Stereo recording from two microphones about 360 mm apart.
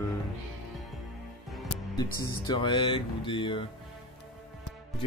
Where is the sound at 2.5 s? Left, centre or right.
Centre.